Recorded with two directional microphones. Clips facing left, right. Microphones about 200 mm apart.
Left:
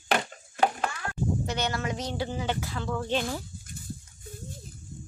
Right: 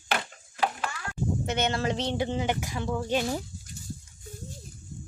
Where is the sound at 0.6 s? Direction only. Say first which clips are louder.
Left 3 dB; 45° left (ahead or behind).